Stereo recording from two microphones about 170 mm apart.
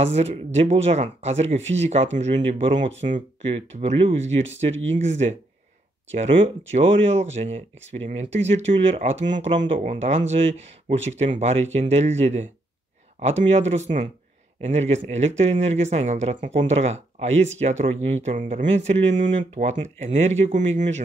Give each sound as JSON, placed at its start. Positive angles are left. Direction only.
{"t": 0.0, "sound": "speech", "side_deg": -40}
{"t": 6.7, "sound": "speech", "side_deg": -40}